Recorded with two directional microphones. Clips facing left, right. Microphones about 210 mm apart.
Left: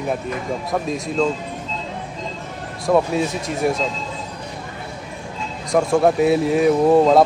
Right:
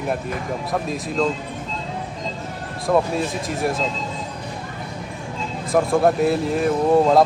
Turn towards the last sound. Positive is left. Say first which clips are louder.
# left 3 dB
turn(degrees=0)  # may be behind; listen again after turning